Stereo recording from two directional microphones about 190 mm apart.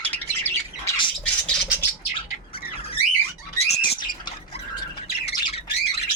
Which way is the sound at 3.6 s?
25° left (ahead or behind).